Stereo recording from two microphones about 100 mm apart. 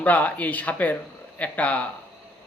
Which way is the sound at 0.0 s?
15° left (ahead or behind).